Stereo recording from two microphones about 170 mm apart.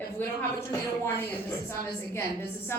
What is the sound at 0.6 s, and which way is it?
A woman's voice, 15° left (ahead or behind).